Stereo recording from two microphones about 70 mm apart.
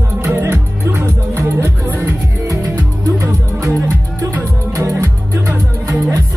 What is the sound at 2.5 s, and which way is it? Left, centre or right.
Music, right.